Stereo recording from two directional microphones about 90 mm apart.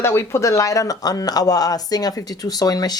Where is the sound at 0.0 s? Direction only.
30° left (ahead or behind).